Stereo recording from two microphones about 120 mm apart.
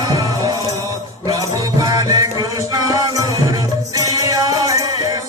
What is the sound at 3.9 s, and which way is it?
Music, 30° right (ahead or behind).